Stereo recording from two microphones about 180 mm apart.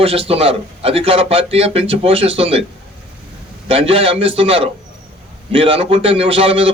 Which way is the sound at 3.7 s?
30° right (ahead or behind).